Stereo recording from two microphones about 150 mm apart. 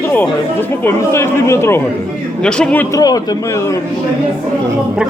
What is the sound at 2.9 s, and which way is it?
Speech, 25° left (ahead or behind).